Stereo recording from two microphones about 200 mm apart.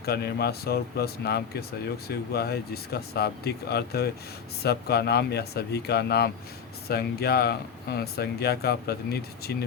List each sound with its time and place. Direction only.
0.0 s speech: 55° left (ahead or behind)